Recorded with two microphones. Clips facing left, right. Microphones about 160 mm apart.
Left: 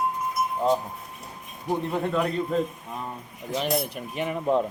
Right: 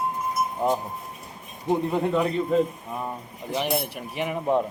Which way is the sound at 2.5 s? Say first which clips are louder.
Right 5 dB; centre (ahead or behind).